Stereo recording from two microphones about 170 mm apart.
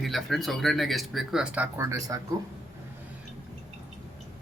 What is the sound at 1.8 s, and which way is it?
Speech, 20° right (ahead or behind).